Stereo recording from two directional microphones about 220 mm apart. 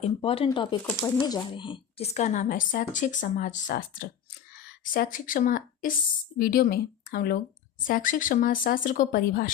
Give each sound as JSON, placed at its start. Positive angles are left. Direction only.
{"t": 0.0, "sound": "speech", "side_deg": 25}